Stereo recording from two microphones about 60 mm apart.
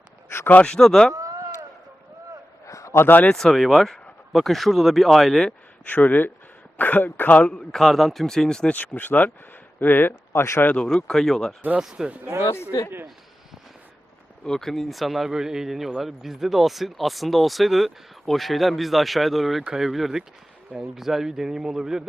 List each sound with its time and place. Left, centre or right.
0.6 s a man's voice: centre
1.1 s a sound: right
2.6 s a sound: left
3.0 s speech: left
3.3 s speech: centre
5.8 s speech: left
7.5 s a man's voice: centre
8.7 s speech: left
11.1 s a man's voice: centre
11.8 s speech: centre
12.2 s speech: right
14.4 s speech: centre